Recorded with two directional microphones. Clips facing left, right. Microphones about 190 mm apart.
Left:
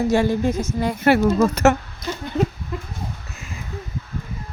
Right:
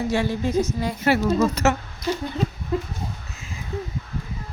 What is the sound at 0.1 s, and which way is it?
Speech, 45° left (ahead or behind).